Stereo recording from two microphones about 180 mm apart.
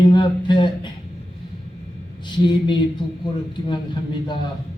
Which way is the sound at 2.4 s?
25° left (ahead or behind).